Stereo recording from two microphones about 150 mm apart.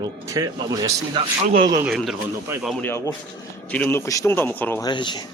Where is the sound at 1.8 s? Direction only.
Centre (ahead or behind).